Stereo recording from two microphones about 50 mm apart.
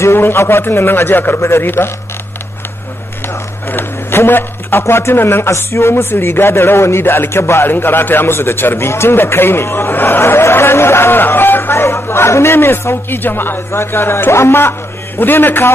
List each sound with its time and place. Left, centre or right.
0.0 s a man's voice: left
3.7 s a man's voice: left
5.6 s a man's voice: left
6.8 s a man's voice: left
7.1 s a man's voice: left
7.6 s a man's voice: left
11.8 s a man's voice: left
13.7 s a man's voice: left
15.1 s a man's voice: left